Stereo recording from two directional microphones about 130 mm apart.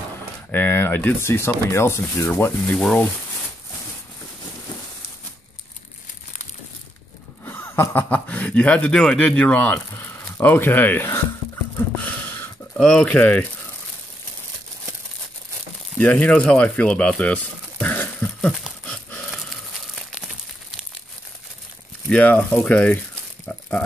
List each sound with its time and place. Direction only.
0.5 s speech: 15° left (ahead or behind)
7.4 s speech: 15° left (ahead or behind)
12.0 s a sound: 15° left (ahead or behind)
16.0 s speech: 10° left (ahead or behind)
22.1 s speech: 15° left (ahead or behind)
23.4 s a sound: 10° left (ahead or behind)